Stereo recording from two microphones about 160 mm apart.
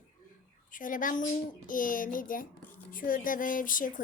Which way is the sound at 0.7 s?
55° left (ahead or behind).